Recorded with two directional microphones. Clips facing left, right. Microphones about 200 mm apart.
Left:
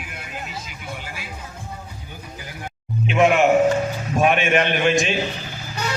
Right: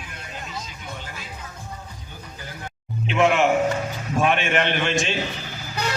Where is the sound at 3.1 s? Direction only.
15° left (ahead or behind).